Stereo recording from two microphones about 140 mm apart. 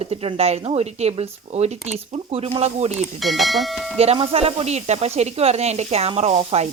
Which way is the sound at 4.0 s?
40° right (ahead or behind).